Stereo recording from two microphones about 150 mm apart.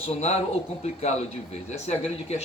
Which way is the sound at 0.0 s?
45° left (ahead or behind).